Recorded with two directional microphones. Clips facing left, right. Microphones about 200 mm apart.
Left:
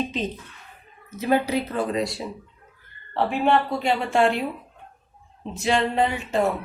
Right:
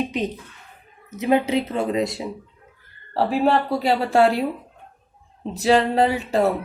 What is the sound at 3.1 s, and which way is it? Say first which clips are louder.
A woman's voice: right 2 dB; 35° right (ahead or behind).